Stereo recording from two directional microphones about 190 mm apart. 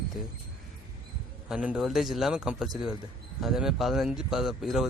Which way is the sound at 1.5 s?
5° right (ahead or behind).